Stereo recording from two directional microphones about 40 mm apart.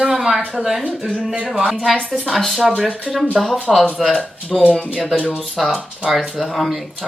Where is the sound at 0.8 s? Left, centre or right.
Right.